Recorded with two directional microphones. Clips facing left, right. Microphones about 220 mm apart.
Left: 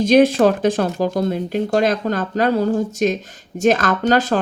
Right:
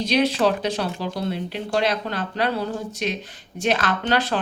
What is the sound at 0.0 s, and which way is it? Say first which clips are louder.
Speech: left 7 dB; 50° left (ahead or behind).